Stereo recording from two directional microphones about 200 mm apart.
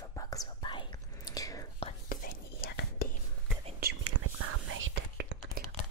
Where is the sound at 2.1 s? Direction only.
50° left (ahead or behind).